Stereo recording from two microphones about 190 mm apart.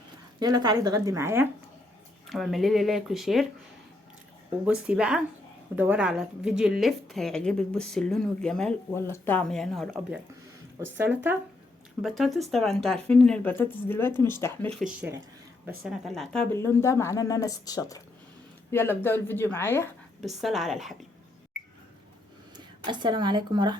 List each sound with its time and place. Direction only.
0.3 s speech: 20° right (ahead or behind)
2.2 s a woman's voice: centre (ahead or behind)
4.6 s a woman's voice: 5° right (ahead or behind)
10.8 s a woman's voice: 10° right (ahead or behind); by 19.9 s 10° left (ahead or behind)
20.2 s a woman's voice: centre (ahead or behind)
22.5 s speech: 25° right (ahead or behind)